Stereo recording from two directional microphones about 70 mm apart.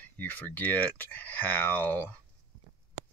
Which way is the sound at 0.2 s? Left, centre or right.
Left.